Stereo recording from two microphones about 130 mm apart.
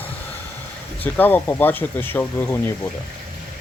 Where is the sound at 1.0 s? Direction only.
15° left (ahead or behind).